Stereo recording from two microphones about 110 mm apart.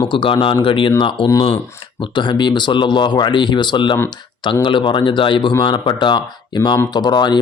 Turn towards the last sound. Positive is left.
turn(degrees=40)  # may be behind; listen again after turning